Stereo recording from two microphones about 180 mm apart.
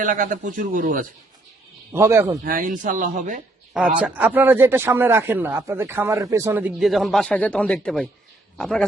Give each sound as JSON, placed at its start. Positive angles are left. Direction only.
{"t": 0.0, "sound": "speech", "side_deg": -45}
{"t": 1.9, "sound": "speech", "side_deg": -15}
{"t": 2.4, "sound": "speech", "side_deg": -50}
{"t": 4.0, "sound": "a man's voice", "side_deg": -10}